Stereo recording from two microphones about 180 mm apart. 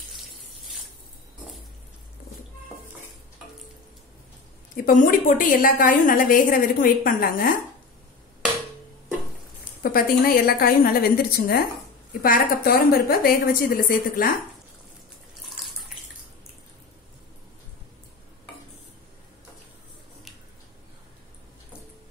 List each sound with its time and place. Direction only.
0.1 s water tap: centre (ahead or behind)
4.7 s a woman's voice: 50° left (ahead or behind)
9.8 s a woman's voice: 55° left (ahead or behind)